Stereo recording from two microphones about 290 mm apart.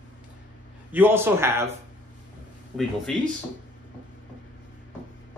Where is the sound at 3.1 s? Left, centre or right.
Centre.